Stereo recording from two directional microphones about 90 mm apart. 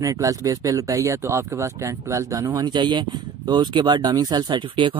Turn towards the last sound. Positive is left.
turn(degrees=-65)  # may be behind; listen again after turning